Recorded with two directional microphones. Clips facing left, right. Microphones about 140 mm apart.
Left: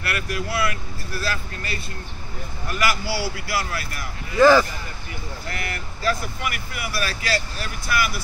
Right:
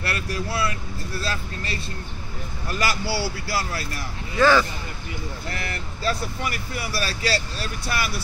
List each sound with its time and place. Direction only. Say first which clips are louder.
0.0 s speech: left 1 dB; 30° right (ahead or behind)
2.8 s speech: left 1 dB; 30° right (ahead or behind)
4.4 s speech: left 4 dB; 15° left (ahead or behind)
5.6 s speech: left 2 dB; 30° right (ahead or behind)